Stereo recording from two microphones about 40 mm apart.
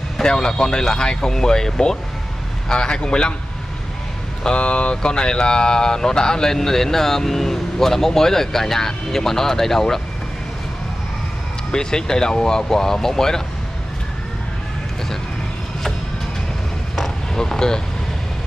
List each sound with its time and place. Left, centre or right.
0.2 s a man's voice: centre
4.4 s speech: left
11.7 s speech: centre
16.9 s vehicle: centre